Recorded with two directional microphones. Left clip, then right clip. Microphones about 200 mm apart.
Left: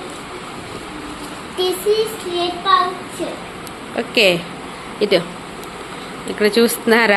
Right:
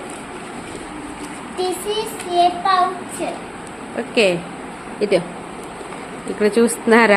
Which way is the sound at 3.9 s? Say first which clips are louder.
Left 2 dB; centre (ahead or behind).